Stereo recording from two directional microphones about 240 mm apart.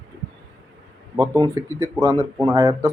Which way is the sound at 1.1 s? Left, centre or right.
Centre.